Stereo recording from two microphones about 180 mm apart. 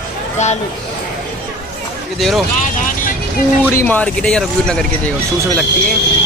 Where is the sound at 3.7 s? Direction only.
10° left (ahead or behind).